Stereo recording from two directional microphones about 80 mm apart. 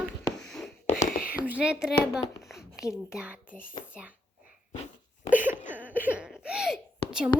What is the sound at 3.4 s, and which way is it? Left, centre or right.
Speech, left.